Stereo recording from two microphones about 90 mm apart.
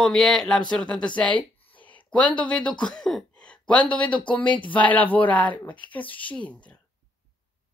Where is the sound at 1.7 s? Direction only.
15° left (ahead or behind).